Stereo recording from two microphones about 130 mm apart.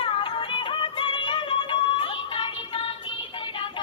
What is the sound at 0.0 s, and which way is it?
Music, 40° left (ahead or behind).